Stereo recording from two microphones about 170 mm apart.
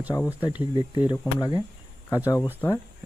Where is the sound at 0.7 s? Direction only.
15° right (ahead or behind).